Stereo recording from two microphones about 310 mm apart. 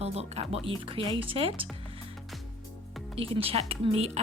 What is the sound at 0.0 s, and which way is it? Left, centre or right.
Speech, centre.